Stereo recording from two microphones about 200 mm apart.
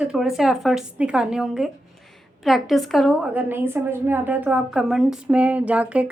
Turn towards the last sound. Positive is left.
turn(degrees=-5)  # may be behind; listen again after turning